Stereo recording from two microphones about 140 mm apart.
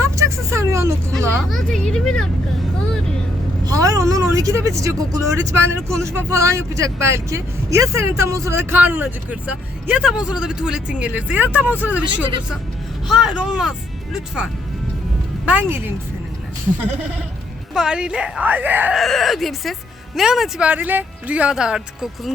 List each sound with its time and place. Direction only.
0.0 s vehicle: 20° right (ahead or behind)
1.5 s speech: 5° left (ahead or behind)
3.6 s a woman's voice: 25° right (ahead or behind)
13.1 s speech: 5° right (ahead or behind)
15.4 s speech: 10° right (ahead or behind)
17.7 s speech: 5° right (ahead or behind)
18.9 s speech: centre (ahead or behind)